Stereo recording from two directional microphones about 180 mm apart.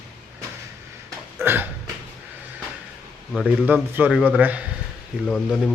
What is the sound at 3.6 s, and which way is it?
A man's voice, 10° right (ahead or behind).